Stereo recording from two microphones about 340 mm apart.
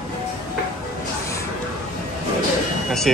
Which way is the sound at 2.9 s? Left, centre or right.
Centre.